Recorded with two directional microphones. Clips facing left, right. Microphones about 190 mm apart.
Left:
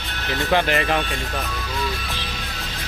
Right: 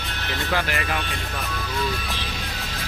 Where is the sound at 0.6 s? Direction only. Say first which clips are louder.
Left 8 dB; 25° left (ahead or behind).